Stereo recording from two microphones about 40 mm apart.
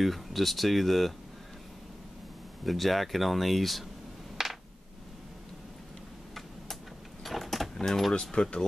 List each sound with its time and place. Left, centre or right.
0.0 s speech: centre
2.6 s speech: centre
4.4 s a sound: centre
7.2 s vehicle: centre
7.7 s keys jangling: centre
8.1 s speech: centre